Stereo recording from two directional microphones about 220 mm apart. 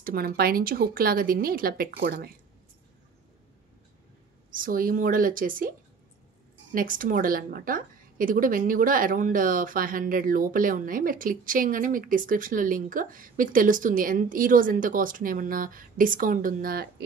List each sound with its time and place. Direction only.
0.0 s a woman's voice: 40° right (ahead or behind)
4.5 s a woman's voice: 40° right (ahead or behind)